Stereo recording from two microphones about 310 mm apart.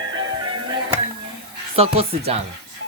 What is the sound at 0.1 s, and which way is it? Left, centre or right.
Music, centre.